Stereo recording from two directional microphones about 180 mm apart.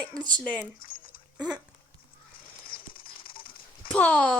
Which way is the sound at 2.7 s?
30° left (ahead or behind).